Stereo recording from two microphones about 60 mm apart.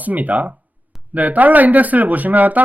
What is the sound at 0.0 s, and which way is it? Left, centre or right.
Speech, right.